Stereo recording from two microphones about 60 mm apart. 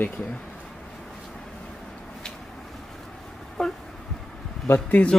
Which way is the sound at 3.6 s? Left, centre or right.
Centre.